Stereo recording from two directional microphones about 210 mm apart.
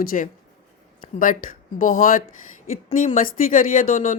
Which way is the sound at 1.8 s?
40° left (ahead or behind).